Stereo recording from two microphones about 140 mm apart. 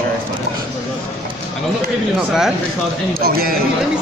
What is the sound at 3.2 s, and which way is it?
Speech, 90° right.